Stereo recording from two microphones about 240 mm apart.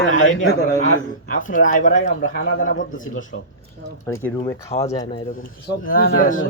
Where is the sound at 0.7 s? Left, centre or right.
Left.